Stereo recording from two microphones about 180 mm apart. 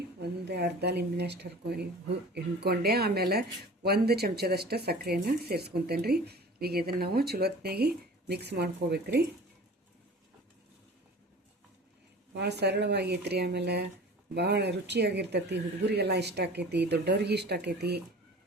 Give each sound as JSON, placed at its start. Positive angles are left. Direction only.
{"t": 0.2, "sound": "speech", "side_deg": -70}
{"t": 12.4, "sound": "speech", "side_deg": -70}